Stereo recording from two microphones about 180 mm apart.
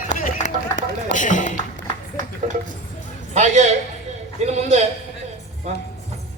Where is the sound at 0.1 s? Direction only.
45° left (ahead or behind).